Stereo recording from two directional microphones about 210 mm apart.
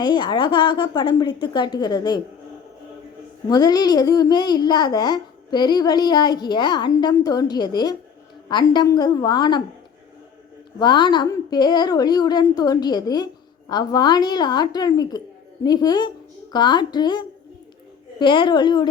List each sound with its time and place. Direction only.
0.0 s a woman's voice: 20° left (ahead or behind)
3.5 s a woman's voice: 20° left (ahead or behind)
10.8 s a woman's voice: 20° left (ahead or behind)